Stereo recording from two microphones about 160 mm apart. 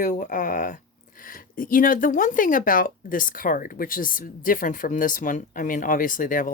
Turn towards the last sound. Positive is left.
turn(degrees=55)  # may be behind; listen again after turning